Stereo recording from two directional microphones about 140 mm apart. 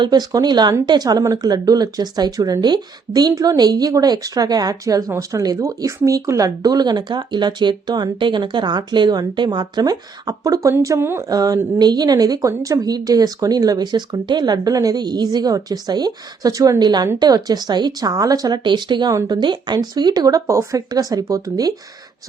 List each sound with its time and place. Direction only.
0.0 s speech: 30° right (ahead or behind)